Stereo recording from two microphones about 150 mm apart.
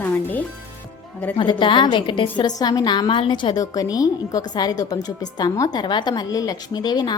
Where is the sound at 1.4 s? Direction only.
35° left (ahead or behind).